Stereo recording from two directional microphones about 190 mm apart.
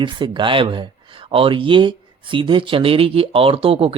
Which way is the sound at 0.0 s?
25° right (ahead or behind).